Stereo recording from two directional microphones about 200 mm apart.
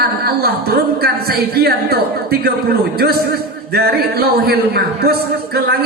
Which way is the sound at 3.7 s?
50° right (ahead or behind).